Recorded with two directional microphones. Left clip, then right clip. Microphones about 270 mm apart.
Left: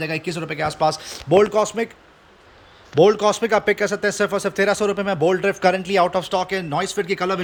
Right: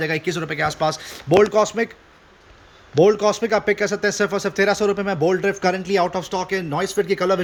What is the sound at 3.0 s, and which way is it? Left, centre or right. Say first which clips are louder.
A man's voice: left 1 dB; centre.